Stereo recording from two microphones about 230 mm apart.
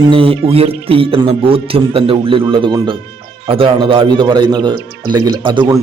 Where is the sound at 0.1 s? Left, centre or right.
Right.